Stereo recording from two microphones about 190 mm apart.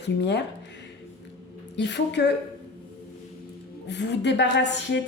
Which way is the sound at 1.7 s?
65° left (ahead or behind).